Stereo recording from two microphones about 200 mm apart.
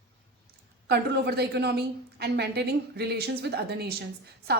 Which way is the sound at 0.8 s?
55° right (ahead or behind).